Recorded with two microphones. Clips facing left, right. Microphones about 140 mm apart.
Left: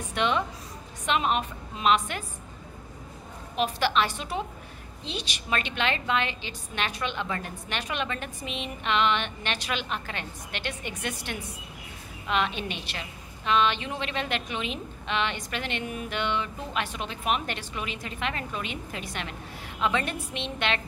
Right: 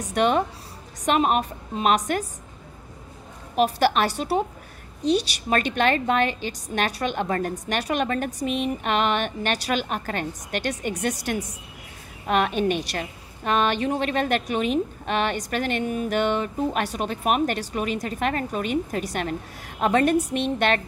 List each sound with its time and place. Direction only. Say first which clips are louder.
0.0 s a woman's voice: right 6 dB; 45° right (ahead or behind)
3.5 s a woman's voice: right 5 dB; 45° right (ahead or behind)
12.3 s a woman's voice: right 7 dB; 50° right (ahead or behind)